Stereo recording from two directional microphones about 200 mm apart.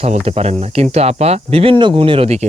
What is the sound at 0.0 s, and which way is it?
Speech, 30° right (ahead or behind).